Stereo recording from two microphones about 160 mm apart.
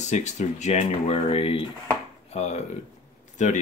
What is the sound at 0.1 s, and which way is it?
Speech, 45° left (ahead or behind).